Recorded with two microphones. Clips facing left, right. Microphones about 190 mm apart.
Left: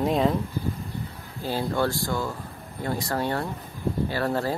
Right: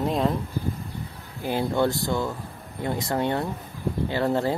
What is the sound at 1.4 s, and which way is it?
Speech, 20° right (ahead or behind).